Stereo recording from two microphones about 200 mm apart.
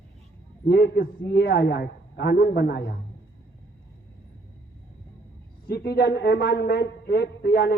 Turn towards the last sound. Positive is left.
turn(degrees=50)  # may be behind; listen again after turning